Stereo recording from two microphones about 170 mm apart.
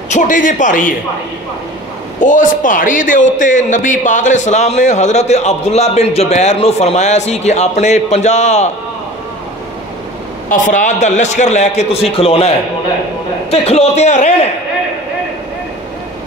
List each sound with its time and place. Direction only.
0.1 s a man's voice: 50° left (ahead or behind)
2.1 s a man's voice: 50° left (ahead or behind)
10.5 s a man's voice: 50° left (ahead or behind)